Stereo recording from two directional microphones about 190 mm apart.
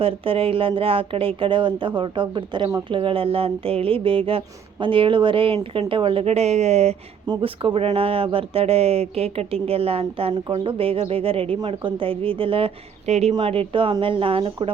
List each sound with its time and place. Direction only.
0.0 s speech: 30° right (ahead or behind)